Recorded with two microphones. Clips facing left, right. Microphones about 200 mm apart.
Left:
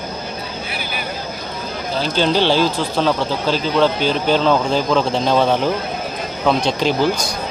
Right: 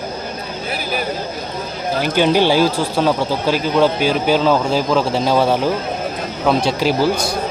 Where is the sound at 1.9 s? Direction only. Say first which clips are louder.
Right 2 dB; 15° right (ahead or behind).